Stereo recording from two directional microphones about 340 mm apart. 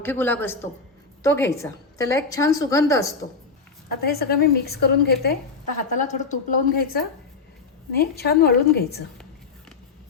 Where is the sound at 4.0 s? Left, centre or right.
Left.